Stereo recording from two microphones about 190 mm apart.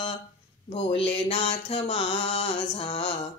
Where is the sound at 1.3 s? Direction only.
25° left (ahead or behind).